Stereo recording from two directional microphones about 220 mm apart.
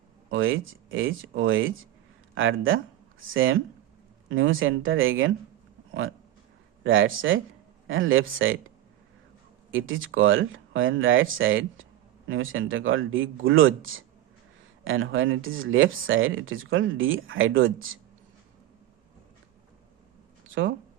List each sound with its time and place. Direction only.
0.3 s speech: 60° right (ahead or behind)
6.8 s speech: 65° right (ahead or behind)
9.7 s speech: 65° right (ahead or behind)